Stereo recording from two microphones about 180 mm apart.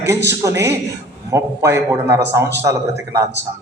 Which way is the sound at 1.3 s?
15° right (ahead or behind).